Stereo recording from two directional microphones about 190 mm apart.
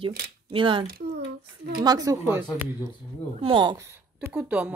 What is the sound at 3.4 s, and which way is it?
A woman's voice, 25° right (ahead or behind).